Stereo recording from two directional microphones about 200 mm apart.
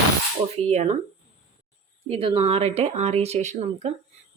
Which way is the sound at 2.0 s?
30° right (ahead or behind).